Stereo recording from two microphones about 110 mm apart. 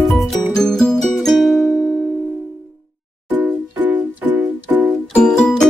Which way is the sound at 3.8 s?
15° right (ahead or behind).